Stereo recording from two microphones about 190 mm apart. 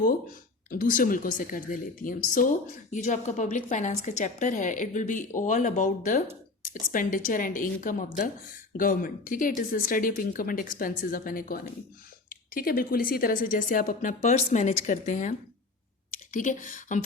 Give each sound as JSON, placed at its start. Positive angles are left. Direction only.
{"t": 0.7, "sound": "a woman's voice", "side_deg": 45}